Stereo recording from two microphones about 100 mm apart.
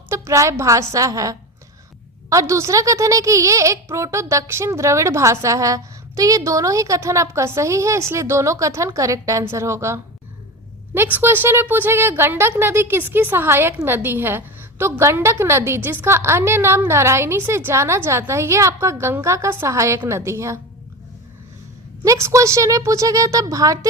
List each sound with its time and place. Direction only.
0.1 s a woman's voice: 30° right (ahead or behind)
22.0 s a woman's voice: 30° right (ahead or behind)